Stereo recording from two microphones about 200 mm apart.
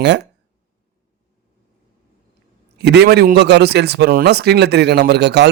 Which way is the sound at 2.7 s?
55° right (ahead or behind).